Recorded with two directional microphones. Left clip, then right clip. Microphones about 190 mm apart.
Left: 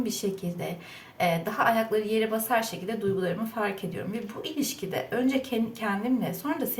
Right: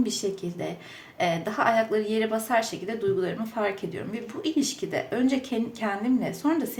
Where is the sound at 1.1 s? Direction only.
20° right (ahead or behind).